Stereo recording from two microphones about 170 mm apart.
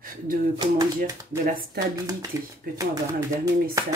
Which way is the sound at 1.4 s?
55° right (ahead or behind).